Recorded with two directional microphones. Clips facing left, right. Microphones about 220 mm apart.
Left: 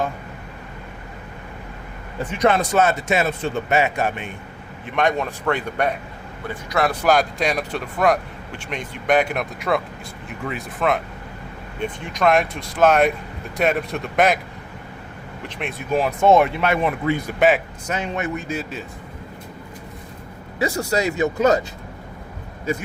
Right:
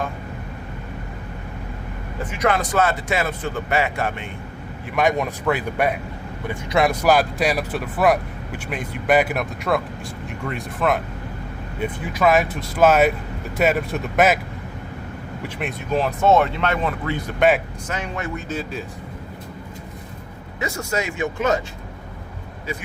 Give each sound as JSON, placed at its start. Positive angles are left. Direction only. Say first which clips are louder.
{"t": 2.4, "sound": "speech", "louder": "left 2 dB", "side_deg": 25}
{"t": 5.1, "sound": "speech", "louder": "right 1 dB", "side_deg": -10}
{"t": 6.7, "sound": "speech", "louder": "right 2 dB", "side_deg": -20}
{"t": 7.0, "sound": "speech", "louder": "right 1 dB", "side_deg": -5}
{"t": 15.4, "sound": "speech", "louder": "right 1 dB", "side_deg": -5}
{"t": 15.9, "sound": "speech", "louder": "left 2 dB", "side_deg": 10}
{"t": 17.8, "sound": "speech", "louder": "left 3 dB", "side_deg": 20}
{"t": 18.4, "sound": "speech", "louder": "even", "side_deg": 10}
{"t": 20.6, "sound": "speech", "louder": "left 4 dB", "side_deg": 35}